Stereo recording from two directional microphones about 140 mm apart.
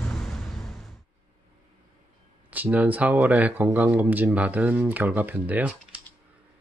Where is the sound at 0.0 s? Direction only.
5° left (ahead or behind).